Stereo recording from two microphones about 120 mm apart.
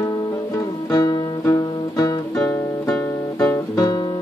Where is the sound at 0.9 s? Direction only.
35° left (ahead or behind).